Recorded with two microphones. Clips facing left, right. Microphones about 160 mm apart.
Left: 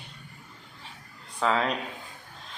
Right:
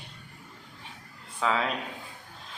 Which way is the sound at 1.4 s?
Centre (ahead or behind).